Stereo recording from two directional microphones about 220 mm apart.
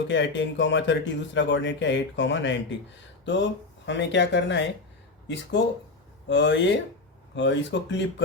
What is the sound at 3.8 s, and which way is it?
Speech, 55° left (ahead or behind).